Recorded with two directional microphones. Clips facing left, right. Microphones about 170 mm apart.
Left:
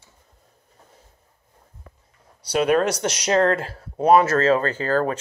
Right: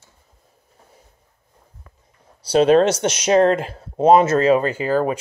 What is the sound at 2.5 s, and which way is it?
Speech, 30° right (ahead or behind).